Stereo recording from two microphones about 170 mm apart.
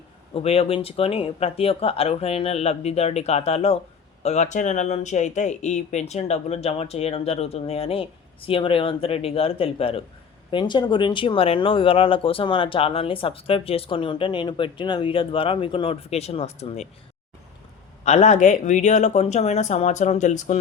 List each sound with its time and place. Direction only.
0.3 s speech: 35° left (ahead or behind)
18.0 s speech: 40° left (ahead or behind)